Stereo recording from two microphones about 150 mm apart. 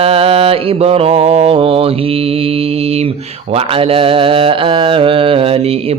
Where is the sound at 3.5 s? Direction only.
40° right (ahead or behind).